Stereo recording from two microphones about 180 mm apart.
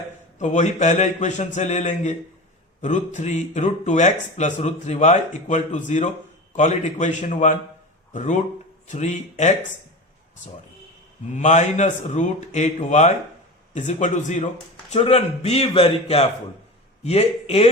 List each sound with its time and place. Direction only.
0.3 s a man's voice: 40° left (ahead or behind)
11.3 s a man's voice: 40° left (ahead or behind)